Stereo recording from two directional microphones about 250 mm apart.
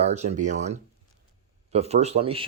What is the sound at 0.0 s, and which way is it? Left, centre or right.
Speech, right.